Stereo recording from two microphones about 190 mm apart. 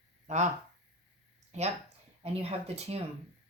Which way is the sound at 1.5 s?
35° right (ahead or behind).